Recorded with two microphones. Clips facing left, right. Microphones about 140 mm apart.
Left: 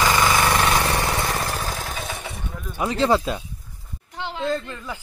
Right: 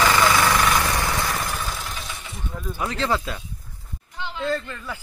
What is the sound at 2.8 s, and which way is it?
Speech, 15° left (ahead or behind).